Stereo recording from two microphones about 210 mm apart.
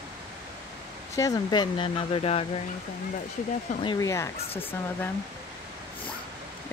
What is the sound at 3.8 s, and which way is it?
Speech, 20° left (ahead or behind).